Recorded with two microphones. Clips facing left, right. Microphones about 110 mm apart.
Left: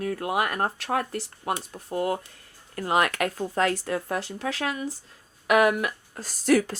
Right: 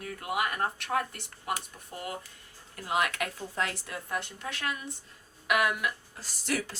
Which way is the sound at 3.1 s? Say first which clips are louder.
Left 7 dB; 85° left.